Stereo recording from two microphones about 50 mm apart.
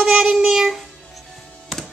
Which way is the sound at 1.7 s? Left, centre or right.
Centre.